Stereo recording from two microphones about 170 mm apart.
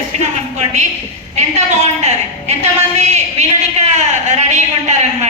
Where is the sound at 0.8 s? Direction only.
40° right (ahead or behind).